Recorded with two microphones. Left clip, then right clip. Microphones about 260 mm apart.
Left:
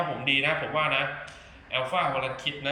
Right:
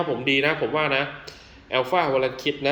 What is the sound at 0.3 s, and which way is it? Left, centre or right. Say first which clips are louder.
A man's voice: right 3 dB; centre.